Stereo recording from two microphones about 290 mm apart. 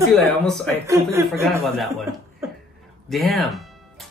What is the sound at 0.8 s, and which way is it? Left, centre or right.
Speech, centre.